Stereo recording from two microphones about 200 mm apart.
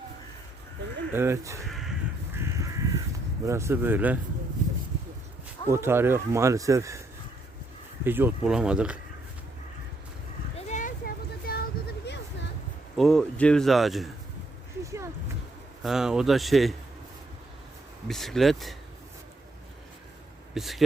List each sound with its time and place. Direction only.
1.1 s speech: 10° right (ahead or behind)
3.4 s speech: 15° right (ahead or behind)
5.7 s speech: 10° right (ahead or behind)
8.0 s speech: 10° right (ahead or behind)
10.7 s a sound: 40° left (ahead or behind)
13.0 s speech: centre (ahead or behind)
14.8 s a sound: 15° right (ahead or behind)
15.8 s speech: centre (ahead or behind)
18.1 s speech: centre (ahead or behind)
20.5 s speech: centre (ahead or behind)